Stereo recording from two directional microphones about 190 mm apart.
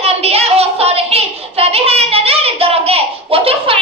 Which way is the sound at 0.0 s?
30° right (ahead or behind).